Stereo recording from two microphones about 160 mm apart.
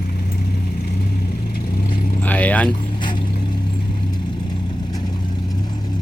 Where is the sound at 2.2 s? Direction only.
10° left (ahead or behind).